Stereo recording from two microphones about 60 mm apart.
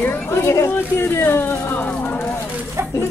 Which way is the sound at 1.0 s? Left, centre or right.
Left.